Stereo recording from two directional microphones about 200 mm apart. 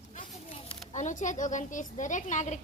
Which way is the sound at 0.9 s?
40° left (ahead or behind).